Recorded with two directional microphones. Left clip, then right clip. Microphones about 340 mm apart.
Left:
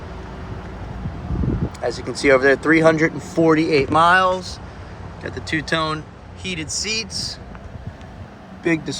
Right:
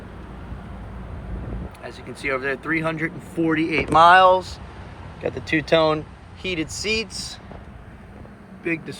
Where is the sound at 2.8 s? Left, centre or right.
Centre.